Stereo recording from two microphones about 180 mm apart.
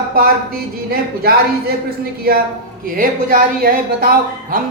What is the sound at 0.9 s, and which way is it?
Speech, 55° right (ahead or behind).